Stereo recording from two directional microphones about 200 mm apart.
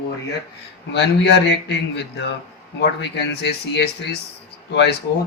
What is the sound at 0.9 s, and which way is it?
Speech, 60° left (ahead or behind).